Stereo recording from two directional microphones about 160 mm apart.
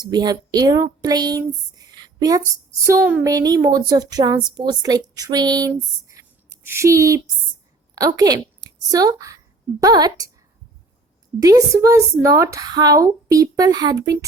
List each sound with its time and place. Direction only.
0.0 s a woman's voice: 25° right (ahead or behind)
11.3 s speech: 20° right (ahead or behind)